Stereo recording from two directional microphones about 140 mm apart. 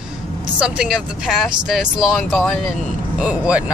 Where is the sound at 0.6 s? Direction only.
5° right (ahead or behind).